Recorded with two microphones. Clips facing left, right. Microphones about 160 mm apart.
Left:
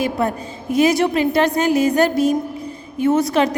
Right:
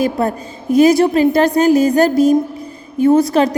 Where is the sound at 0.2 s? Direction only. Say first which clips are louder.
Right 3 dB; 35° right (ahead or behind).